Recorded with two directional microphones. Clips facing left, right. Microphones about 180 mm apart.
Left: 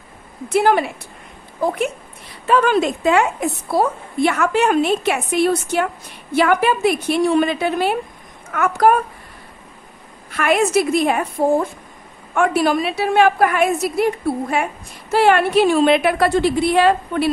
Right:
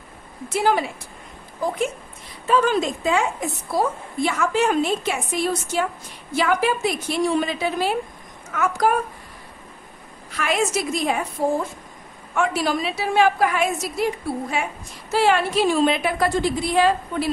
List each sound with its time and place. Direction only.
0.5 s a woman's voice: 60° left (ahead or behind)
2.4 s a woman's voice: 65° left (ahead or behind)
10.3 s a woman's voice: 55° left (ahead or behind)